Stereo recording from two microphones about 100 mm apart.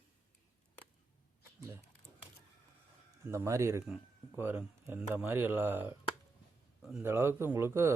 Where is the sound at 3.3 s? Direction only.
30° right (ahead or behind).